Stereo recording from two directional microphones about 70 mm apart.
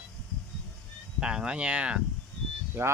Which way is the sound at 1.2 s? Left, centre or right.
Centre.